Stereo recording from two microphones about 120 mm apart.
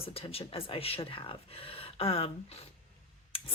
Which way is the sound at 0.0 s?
55° left (ahead or behind).